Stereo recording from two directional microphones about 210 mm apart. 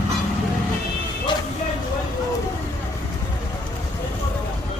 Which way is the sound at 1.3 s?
20° left (ahead or behind).